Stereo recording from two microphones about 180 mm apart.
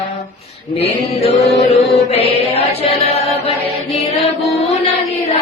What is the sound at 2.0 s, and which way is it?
Music, 35° left (ahead or behind).